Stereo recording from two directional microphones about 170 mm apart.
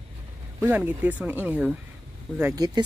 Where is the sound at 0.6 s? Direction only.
10° right (ahead or behind).